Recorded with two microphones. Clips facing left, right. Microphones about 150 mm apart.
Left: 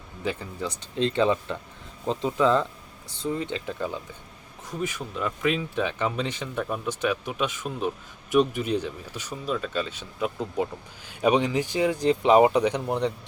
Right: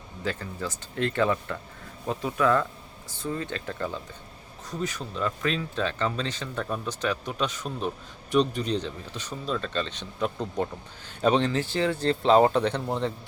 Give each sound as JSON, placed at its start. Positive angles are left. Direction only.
{"t": 0.3, "sound": "speech", "side_deg": 15}